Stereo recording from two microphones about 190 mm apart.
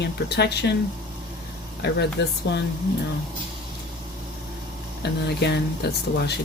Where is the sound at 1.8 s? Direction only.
65° left (ahead or behind).